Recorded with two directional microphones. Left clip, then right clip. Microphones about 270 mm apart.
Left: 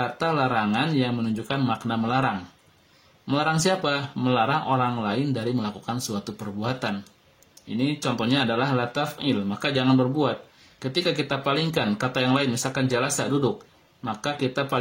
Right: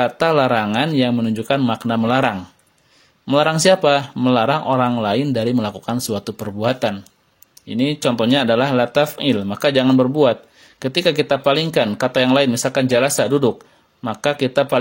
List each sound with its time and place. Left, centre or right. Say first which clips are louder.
0.0 s speech: right 9 dB; right